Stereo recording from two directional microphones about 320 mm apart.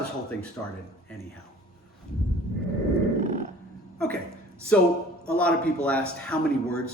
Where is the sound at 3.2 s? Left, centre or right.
Right.